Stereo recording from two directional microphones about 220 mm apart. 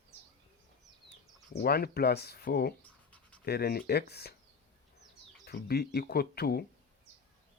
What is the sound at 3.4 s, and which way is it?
Speech, 45° left (ahead or behind).